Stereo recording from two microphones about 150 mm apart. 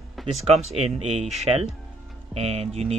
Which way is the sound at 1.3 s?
45° right (ahead or behind).